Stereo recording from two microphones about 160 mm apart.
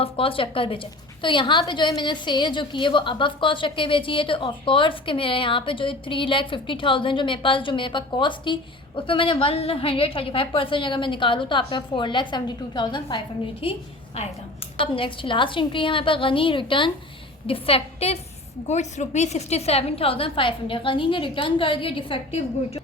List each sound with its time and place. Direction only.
0.0 s a woman's voice: 35° left (ahead or behind)